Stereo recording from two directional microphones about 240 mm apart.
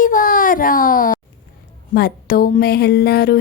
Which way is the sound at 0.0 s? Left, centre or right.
Left.